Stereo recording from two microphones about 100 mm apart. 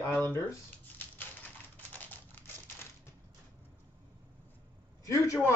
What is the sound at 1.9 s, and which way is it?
Typewriter, 20° left (ahead or behind).